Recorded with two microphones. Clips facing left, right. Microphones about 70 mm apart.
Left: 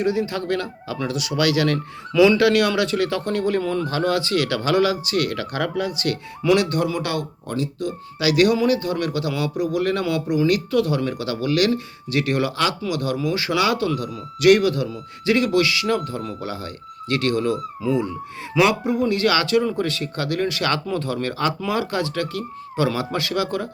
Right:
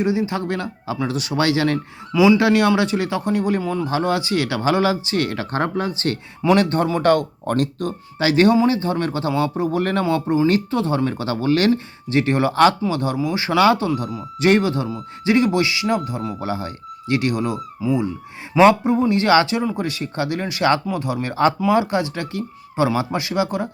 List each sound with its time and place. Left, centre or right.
0.0 s speech: right
3.8 s speech: right
7.9 s speech: right; by 18.1 s centre
18.5 s speech: right